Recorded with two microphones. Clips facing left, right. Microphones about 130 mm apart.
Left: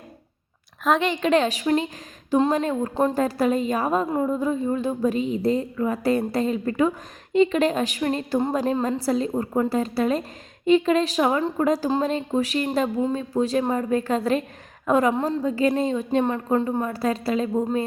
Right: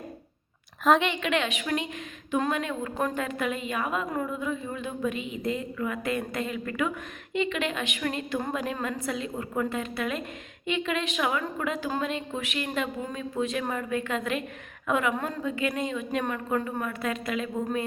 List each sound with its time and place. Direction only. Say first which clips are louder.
1.0 s speech: left 7 dB; 35° left (ahead or behind)